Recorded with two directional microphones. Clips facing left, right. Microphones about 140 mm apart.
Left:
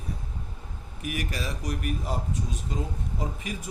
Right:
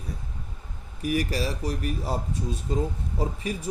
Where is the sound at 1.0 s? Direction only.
35° right (ahead or behind).